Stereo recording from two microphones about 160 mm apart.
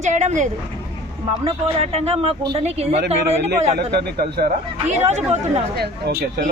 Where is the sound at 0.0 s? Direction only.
50° right (ahead or behind).